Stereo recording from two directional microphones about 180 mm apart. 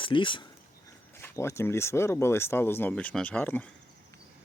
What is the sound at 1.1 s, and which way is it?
Speech, 15° left (ahead or behind).